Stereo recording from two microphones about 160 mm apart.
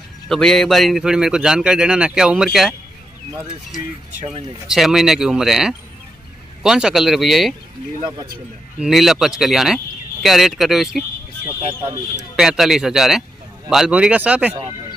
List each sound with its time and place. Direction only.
0.3 s speech: 5° left (ahead or behind)
4.6 s speech: centre (ahead or behind)
8.7 s speech: 5° right (ahead or behind)
11.4 s speech: 15° right (ahead or behind)
12.4 s speech: centre (ahead or behind)